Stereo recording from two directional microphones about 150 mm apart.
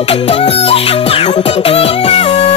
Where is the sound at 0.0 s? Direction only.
45° left (ahead or behind).